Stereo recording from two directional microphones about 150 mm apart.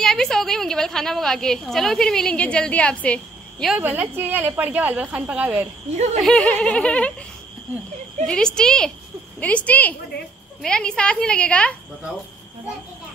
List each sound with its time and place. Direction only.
0.0 s speech: 5° left (ahead or behind)
3.7 s a woman's voice: 10° right (ahead or behind)
5.9 s speech: 50° right (ahead or behind)
6.2 s a woman's voice: 5° left (ahead or behind)
8.3 s a woman's voice: 5° left (ahead or behind)